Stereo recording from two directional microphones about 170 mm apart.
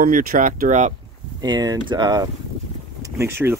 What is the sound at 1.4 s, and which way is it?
Speech, 25° right (ahead or behind).